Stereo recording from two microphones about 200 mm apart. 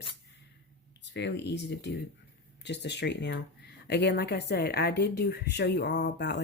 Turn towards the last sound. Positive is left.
turn(degrees=60)  # may be behind; listen again after turning